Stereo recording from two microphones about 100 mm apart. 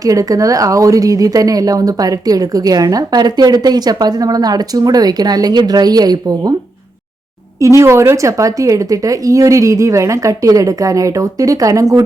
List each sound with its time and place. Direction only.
0.0 s a woman's voice: 35° right (ahead or behind)
7.6 s a woman's voice: 30° right (ahead or behind)